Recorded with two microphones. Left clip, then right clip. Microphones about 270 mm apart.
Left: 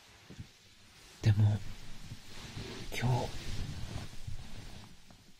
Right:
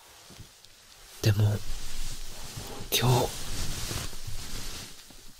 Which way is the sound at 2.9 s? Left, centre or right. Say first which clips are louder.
Right 11 dB; right.